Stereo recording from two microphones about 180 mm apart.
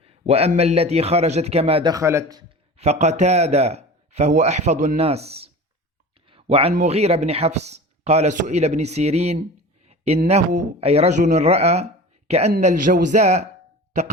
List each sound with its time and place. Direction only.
0.0 s speech: 35° right (ahead or behind); by 2.4 s 15° right (ahead or behind)
2.7 s speech: 35° right (ahead or behind)
9.8 s a sound: 35° right (ahead or behind)
10.2 s speech: 40° right (ahead or behind)